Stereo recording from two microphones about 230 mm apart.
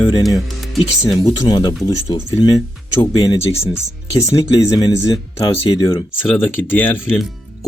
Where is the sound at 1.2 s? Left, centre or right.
Centre.